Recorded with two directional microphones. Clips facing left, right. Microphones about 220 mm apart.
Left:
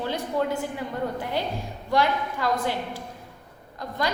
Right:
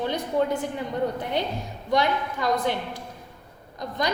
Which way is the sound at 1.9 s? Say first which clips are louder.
Even; 20° right (ahead or behind).